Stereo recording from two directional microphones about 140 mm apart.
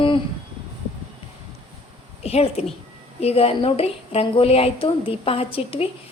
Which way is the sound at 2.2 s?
45° left (ahead or behind).